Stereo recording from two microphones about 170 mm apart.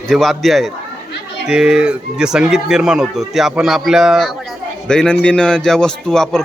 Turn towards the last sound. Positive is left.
turn(degrees=5)  # may be behind; listen again after turning